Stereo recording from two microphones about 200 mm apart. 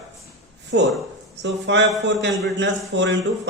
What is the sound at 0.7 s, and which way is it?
A man's voice, 60° right (ahead or behind).